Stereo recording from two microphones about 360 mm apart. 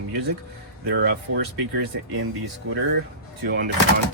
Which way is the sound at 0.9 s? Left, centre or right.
Right.